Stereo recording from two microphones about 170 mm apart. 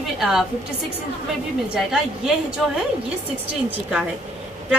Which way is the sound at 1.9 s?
5° right (ahead or behind).